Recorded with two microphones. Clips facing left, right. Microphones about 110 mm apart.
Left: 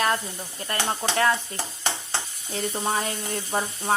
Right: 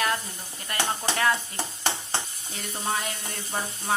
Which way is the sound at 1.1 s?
30° left (ahead or behind).